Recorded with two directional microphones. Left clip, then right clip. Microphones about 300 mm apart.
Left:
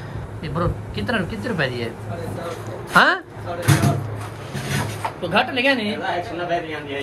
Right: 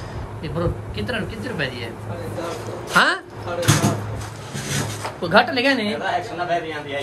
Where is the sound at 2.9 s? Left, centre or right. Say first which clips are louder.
Left 2 dB; centre.